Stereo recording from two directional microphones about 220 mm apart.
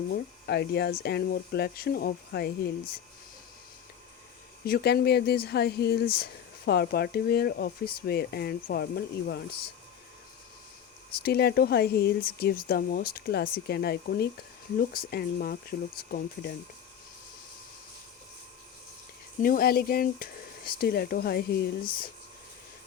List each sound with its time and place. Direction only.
0.1 s speech: 45° left (ahead or behind)
4.6 s speech: 45° left (ahead or behind)
11.2 s speech: 45° left (ahead or behind)
19.4 s speech: 40° left (ahead or behind)